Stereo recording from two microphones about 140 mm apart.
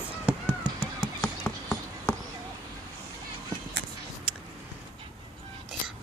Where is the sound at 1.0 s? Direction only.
5° left (ahead or behind).